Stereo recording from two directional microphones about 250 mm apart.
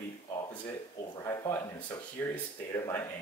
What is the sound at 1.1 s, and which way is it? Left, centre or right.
Speech, centre.